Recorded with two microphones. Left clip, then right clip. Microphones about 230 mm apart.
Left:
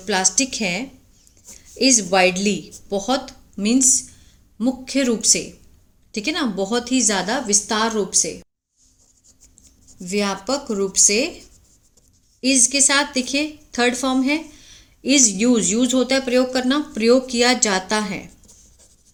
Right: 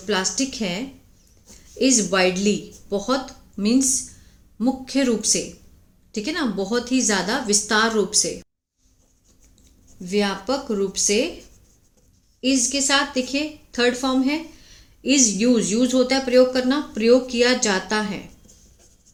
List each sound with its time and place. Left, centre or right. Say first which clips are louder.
0.0 s a woman's voice: left 3 dB; left
10.0 s a woman's voice: even; left
12.4 s a woman's voice: left 4 dB; left